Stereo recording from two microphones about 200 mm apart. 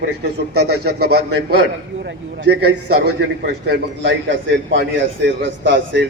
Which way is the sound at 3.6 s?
55° right (ahead or behind).